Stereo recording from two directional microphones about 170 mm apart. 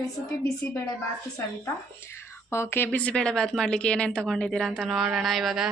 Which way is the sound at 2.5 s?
15° left (ahead or behind).